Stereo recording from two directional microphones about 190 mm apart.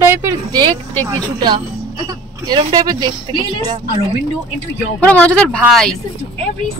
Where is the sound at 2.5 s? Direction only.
20° right (ahead or behind).